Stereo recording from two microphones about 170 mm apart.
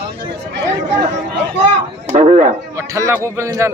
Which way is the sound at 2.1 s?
45° right (ahead or behind).